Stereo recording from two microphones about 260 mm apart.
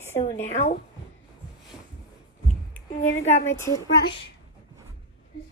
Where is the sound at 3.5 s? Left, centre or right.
Centre.